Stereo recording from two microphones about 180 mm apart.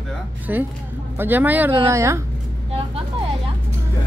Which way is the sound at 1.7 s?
20° right (ahead or behind).